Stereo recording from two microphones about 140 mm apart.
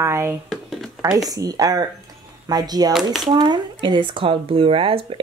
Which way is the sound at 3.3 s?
30° right (ahead or behind).